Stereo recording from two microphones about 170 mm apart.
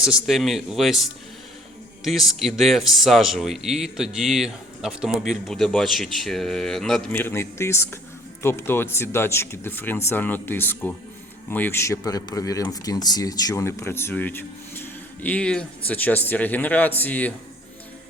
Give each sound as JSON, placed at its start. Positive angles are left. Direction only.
{"t": 0.0, "sound": "speech", "side_deg": -5}